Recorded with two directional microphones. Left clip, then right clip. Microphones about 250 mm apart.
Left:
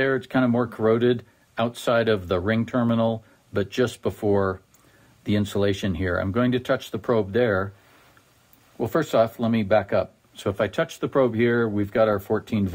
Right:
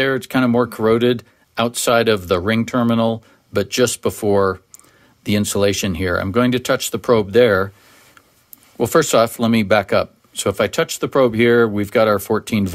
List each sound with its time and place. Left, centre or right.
0.0 s speech: right
8.7 s speech: right